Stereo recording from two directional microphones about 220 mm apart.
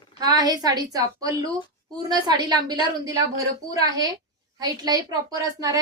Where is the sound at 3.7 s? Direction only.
15° right (ahead or behind).